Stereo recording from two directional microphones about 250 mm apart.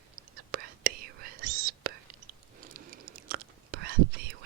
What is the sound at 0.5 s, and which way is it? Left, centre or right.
Whispering, right.